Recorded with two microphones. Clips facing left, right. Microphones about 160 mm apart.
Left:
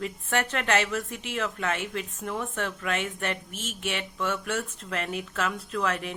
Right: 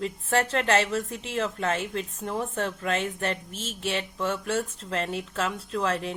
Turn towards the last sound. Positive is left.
turn(degrees=-30)  # may be behind; listen again after turning